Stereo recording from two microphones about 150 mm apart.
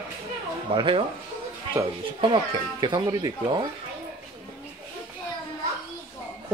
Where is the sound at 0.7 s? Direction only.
35° right (ahead or behind).